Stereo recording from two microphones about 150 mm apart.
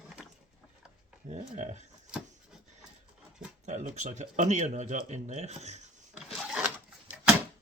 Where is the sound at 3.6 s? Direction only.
55° right (ahead or behind).